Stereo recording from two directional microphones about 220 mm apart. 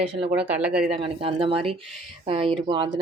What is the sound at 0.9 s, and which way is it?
Speech, 25° right (ahead or behind).